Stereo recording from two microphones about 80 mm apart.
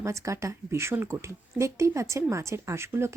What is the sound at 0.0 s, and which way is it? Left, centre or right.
Speech, right.